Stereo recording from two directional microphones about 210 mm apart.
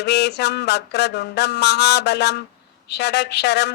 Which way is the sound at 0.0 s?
55° left (ahead or behind).